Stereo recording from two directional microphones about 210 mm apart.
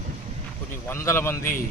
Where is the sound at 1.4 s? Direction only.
45° left (ahead or behind).